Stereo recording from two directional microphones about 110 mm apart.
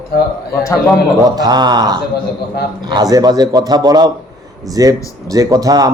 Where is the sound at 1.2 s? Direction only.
35° right (ahead or behind).